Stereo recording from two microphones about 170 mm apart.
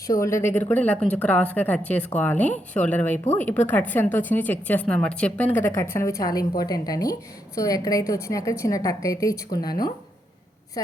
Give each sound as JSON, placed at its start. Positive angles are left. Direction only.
{"t": 0.1, "sound": "a woman's voice", "side_deg": 15}
{"t": 10.8, "sound": "a woman's voice", "side_deg": 20}